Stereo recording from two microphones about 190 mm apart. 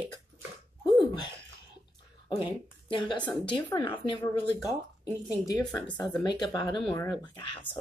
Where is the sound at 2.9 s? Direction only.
25° left (ahead or behind).